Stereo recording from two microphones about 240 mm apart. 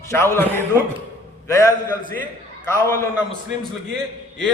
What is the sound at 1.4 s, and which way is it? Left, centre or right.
Speech, centre.